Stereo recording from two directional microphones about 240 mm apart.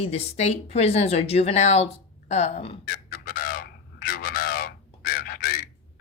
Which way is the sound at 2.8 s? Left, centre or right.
Left.